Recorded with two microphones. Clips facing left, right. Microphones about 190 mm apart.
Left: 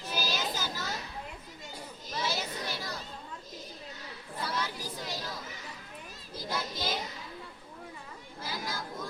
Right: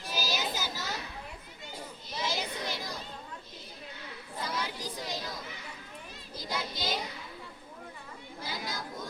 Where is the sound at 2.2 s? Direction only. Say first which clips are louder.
Right 1 dB; 15° right (ahead or behind).